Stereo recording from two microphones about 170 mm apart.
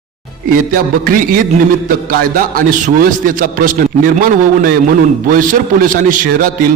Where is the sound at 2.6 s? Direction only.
55° right (ahead or behind).